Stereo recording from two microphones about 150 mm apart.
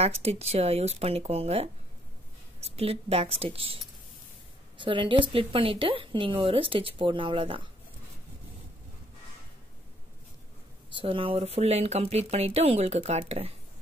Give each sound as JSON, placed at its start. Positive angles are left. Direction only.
{"t": 0.0, "sound": "a woman's voice", "side_deg": -45}
{"t": 10.9, "sound": "speech", "side_deg": -35}